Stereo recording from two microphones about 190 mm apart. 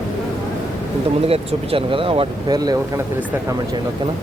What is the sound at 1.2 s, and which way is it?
Speech, 30° right (ahead or behind).